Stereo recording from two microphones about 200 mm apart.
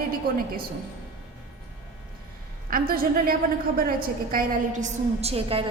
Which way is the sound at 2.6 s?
45° right (ahead or behind).